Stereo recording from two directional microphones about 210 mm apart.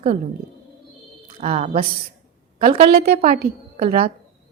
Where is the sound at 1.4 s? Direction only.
30° right (ahead or behind).